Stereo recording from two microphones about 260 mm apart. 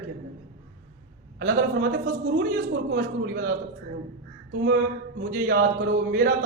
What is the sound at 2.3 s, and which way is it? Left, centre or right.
Speech, right.